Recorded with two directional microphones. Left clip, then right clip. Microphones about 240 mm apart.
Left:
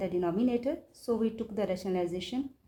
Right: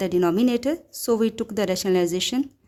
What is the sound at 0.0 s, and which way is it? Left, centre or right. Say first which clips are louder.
A woman's voice: right 9 dB; right.